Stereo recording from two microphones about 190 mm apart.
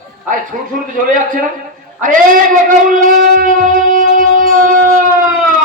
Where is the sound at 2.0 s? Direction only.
45° right (ahead or behind).